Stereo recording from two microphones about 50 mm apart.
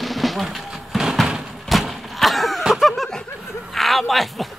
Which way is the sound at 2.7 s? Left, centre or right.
Centre.